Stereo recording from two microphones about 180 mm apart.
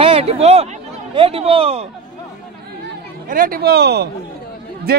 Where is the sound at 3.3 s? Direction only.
50° right (ahead or behind).